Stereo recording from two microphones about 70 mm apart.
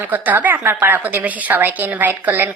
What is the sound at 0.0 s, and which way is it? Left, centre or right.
A woman's voice, right.